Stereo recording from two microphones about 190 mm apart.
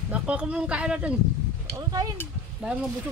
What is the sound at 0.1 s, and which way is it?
Speech, 5° right (ahead or behind).